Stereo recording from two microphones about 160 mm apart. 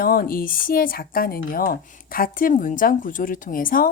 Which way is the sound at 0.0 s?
65° left (ahead or behind).